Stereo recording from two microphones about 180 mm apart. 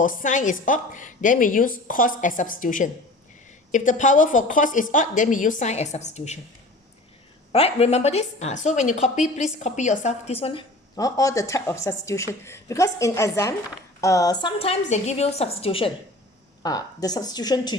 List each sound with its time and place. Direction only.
0.0 s a woman's voice: 50° left (ahead or behind)
7.5 s a woman's voice: 35° left (ahead or behind)
16.6 s speech: 20° left (ahead or behind)